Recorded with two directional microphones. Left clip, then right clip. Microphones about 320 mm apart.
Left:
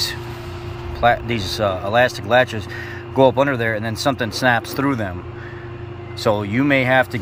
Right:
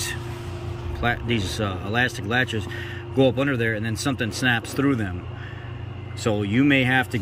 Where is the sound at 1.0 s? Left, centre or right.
Centre.